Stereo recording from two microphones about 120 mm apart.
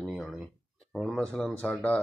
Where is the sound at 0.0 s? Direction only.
Centre (ahead or behind).